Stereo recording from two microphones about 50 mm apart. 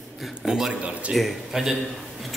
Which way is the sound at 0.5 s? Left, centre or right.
Centre.